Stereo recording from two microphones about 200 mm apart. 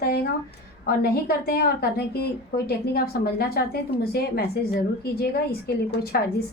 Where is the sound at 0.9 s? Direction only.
50° left (ahead or behind).